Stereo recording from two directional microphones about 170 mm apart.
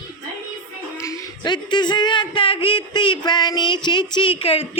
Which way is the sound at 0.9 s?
20° left (ahead or behind).